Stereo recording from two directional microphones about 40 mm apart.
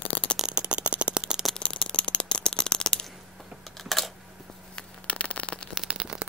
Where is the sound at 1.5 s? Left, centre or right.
Left.